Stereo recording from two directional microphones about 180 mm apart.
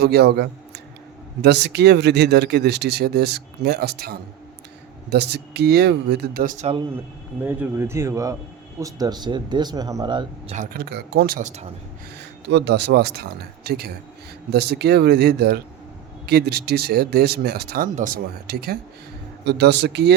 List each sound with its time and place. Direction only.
0.0 s speech: 65° right (ahead or behind); by 6.7 s 45° right (ahead or behind)
7.4 s speech: 10° right (ahead or behind)
10.5 s speech: 50° right (ahead or behind)
12.2 s speech: 70° right (ahead or behind)
17.9 s speech: 50° right (ahead or behind)
19.5 s speech: 70° right (ahead or behind)